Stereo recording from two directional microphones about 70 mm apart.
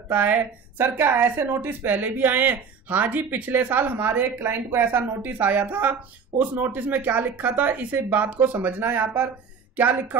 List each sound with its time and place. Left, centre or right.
0.1 s a woman's voice: right